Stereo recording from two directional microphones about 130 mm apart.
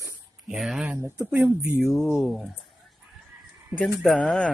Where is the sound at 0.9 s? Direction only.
15° right (ahead or behind).